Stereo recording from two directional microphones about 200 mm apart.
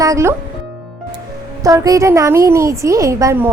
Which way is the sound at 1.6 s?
15° right (ahead or behind).